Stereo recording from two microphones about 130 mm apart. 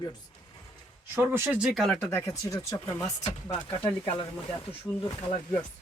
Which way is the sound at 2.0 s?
20° left (ahead or behind).